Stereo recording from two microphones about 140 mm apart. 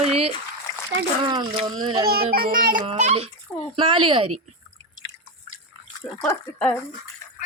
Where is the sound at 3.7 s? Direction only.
40° right (ahead or behind).